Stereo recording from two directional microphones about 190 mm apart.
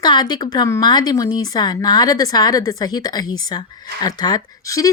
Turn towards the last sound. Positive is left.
turn(degrees=20)  # may be behind; listen again after turning